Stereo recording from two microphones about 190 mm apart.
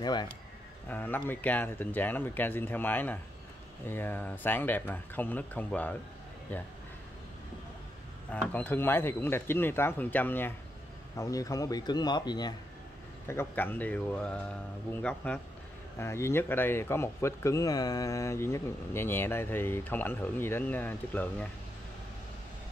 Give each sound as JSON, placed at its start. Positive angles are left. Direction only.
{"t": 0.0, "sound": "a man's voice", "side_deg": 20}
{"t": 0.8, "sound": "speech", "side_deg": 10}
{"t": 8.3, "sound": "a man's voice", "side_deg": 10}
{"t": 13.3, "sound": "speech", "side_deg": 10}